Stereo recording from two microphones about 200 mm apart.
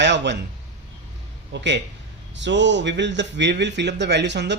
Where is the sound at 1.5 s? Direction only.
60° right (ahead or behind).